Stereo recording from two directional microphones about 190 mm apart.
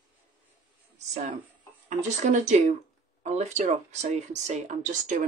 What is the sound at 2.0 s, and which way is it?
Speech, 40° right (ahead or behind).